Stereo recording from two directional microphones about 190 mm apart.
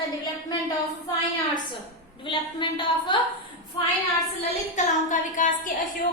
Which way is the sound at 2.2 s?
25° left (ahead or behind).